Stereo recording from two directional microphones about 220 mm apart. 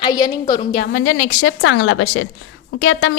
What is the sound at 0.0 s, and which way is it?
Speech, 20° left (ahead or behind).